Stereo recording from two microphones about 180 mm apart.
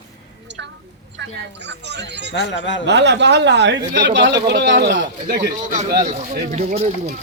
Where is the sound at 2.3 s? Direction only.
75° left (ahead or behind).